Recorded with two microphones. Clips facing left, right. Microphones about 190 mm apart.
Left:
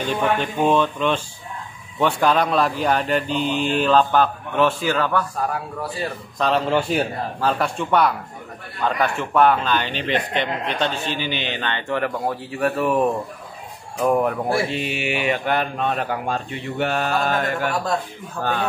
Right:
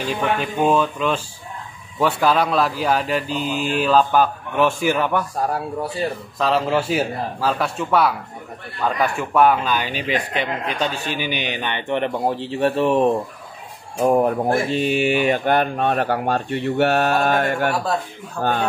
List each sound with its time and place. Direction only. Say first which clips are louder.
0.0 s a man's voice: left 1 dB; 5° right (ahead or behind)
6.3 s a man's voice: even; 5° right (ahead or behind); by 17.5 s 55° right (ahead or behind)
18.4 s speech: right 3 dB; 40° right (ahead or behind)